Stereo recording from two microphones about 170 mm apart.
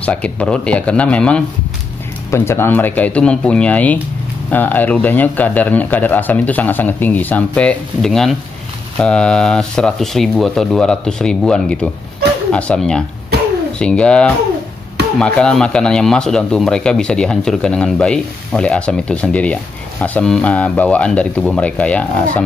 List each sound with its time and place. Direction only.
0.0 s speech: 5° left (ahead or behind)
13.3 s a sound: 70° right (ahead or behind)
13.7 s speech: 5° left (ahead or behind)